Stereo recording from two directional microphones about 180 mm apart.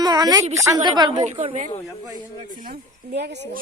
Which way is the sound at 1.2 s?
40° right (ahead or behind).